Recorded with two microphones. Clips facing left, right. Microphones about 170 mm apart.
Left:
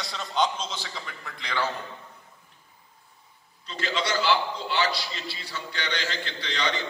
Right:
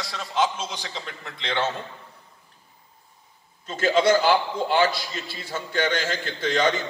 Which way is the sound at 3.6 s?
50° right (ahead or behind).